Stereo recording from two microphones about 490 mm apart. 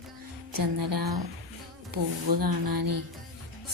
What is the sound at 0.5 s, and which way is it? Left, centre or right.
A woman's voice, right.